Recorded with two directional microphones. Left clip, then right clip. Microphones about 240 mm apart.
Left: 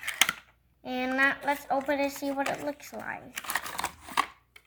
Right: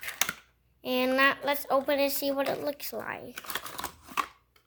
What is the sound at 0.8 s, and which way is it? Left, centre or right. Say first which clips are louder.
A woman's voice: right 2 dB; right.